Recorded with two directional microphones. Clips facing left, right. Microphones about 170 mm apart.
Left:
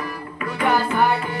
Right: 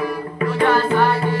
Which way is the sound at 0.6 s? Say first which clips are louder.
Right 3 dB; 10° left (ahead or behind).